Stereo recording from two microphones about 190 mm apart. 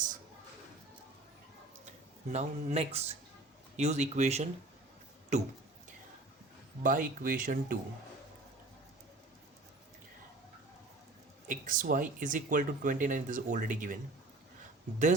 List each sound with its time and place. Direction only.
2.3 s speech: 35° right (ahead or behind)
6.8 s speech: 45° right (ahead or behind)
11.4 s speech: 45° right (ahead or behind)